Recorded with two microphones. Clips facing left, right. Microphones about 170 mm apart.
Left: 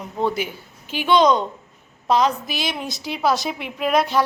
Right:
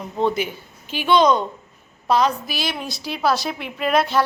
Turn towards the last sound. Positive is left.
turn(degrees=15)  # may be behind; listen again after turning